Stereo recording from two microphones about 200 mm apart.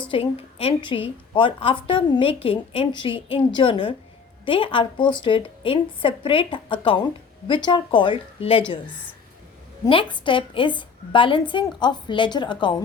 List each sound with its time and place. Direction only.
0.1 s a woman's voice: 25° left (ahead or behind)
9.8 s a woman's voice: 25° left (ahead or behind)